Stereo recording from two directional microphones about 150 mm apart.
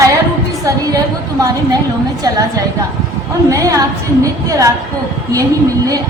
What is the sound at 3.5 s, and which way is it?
A woman's voice, 25° right (ahead or behind).